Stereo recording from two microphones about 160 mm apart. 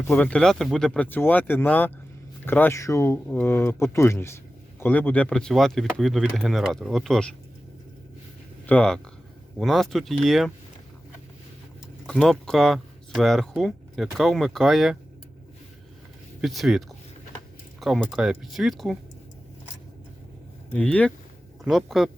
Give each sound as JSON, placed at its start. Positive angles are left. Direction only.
{"t": 0.1, "sound": "speech", "side_deg": 10}
{"t": 8.6, "sound": "speech", "side_deg": 5}
{"t": 12.0, "sound": "speech", "side_deg": 5}
{"t": 16.4, "sound": "speech", "side_deg": 0}
{"t": 20.7, "sound": "speech", "side_deg": 10}